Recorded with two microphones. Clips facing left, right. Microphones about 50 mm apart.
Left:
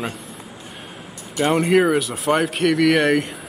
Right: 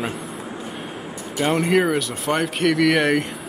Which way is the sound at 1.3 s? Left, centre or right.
Centre.